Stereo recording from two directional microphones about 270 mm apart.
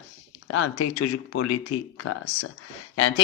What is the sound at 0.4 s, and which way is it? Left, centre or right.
Speech, left.